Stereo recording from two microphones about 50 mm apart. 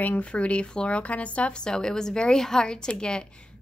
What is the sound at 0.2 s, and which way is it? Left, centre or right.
A woman's voice, left.